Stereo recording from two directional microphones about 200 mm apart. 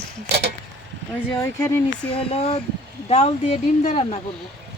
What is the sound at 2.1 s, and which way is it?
Speech, 30° left (ahead or behind).